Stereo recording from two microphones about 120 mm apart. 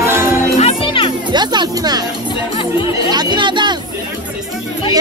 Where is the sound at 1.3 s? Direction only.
35° right (ahead or behind).